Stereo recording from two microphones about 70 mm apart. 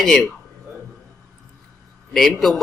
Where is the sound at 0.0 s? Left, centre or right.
Centre.